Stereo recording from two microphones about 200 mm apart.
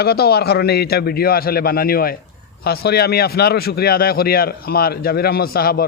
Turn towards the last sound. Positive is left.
turn(degrees=50)  # may be behind; listen again after turning